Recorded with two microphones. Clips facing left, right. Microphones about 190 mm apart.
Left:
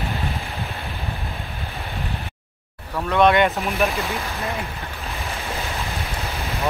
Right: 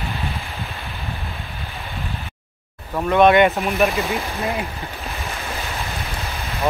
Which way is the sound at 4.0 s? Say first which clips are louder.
Right 3 dB; 15° right (ahead or behind).